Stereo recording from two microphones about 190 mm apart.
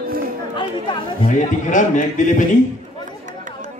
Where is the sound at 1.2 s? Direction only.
40° left (ahead or behind).